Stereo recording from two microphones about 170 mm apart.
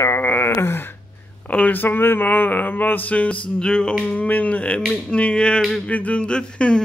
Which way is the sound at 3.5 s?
5° left (ahead or behind).